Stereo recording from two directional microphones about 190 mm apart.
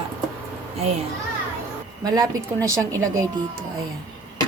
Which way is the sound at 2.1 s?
20° right (ahead or behind).